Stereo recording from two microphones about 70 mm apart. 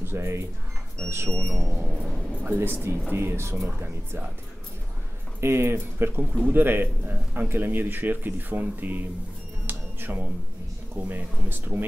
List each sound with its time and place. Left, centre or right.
0.0 s speech: right
2.4 s a man's voice: right
5.4 s a man's voice: right
9.7 s music: right
11.0 s a man's voice: right